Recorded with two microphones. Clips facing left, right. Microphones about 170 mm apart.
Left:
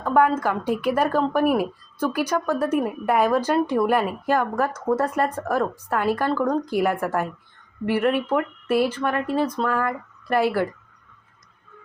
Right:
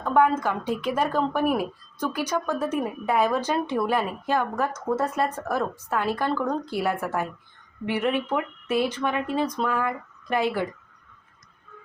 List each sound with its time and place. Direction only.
0.0 s speech: 10° left (ahead or behind)
9.6 s speech: 10° right (ahead or behind)
9.8 s a woman's voice: 5° left (ahead or behind)